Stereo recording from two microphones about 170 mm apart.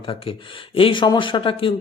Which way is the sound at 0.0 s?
30° left (ahead or behind).